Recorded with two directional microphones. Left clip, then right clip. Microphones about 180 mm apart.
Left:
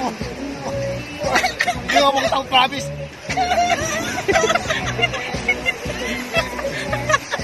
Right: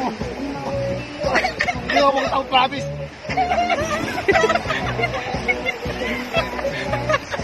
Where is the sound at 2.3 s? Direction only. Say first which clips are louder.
Left 1 dB; centre (ahead or behind).